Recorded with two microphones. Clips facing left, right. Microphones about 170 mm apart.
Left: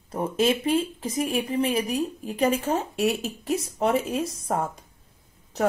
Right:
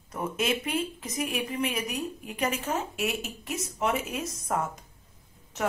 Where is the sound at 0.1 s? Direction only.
30° left (ahead or behind).